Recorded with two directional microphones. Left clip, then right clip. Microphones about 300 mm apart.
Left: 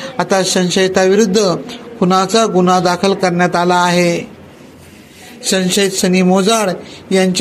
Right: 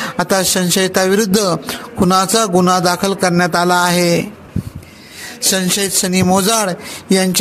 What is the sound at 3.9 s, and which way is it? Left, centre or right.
Speech, right.